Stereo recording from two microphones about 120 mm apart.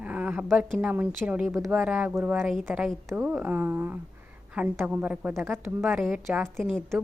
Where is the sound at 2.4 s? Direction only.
5° left (ahead or behind).